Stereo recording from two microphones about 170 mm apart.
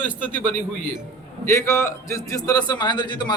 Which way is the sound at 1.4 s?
15° left (ahead or behind).